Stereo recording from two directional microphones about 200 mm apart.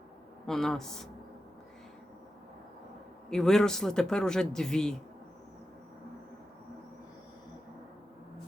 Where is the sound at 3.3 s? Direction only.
5° left (ahead or behind).